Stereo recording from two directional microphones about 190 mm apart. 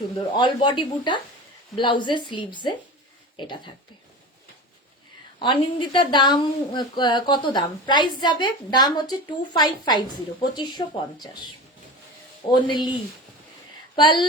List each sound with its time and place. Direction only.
0.3 s speech: 25° left (ahead or behind)
5.4 s speech: 25° left (ahead or behind)
13.9 s speech: 25° left (ahead or behind)